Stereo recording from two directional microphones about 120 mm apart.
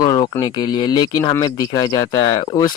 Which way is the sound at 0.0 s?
35° left (ahead or behind).